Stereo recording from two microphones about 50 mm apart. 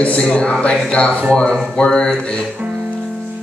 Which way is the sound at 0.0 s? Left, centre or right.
Left.